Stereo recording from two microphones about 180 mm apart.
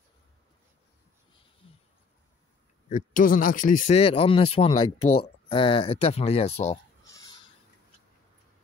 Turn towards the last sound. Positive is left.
turn(degrees=35)  # may be behind; listen again after turning